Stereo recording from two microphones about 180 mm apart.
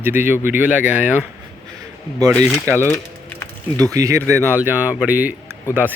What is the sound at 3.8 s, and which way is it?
Speech, 20° right (ahead or behind).